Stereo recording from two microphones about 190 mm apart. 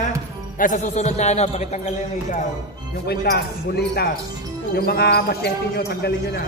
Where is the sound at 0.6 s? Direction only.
40° left (ahead or behind).